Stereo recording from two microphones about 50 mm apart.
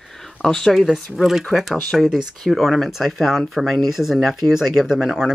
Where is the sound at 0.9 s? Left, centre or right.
Centre.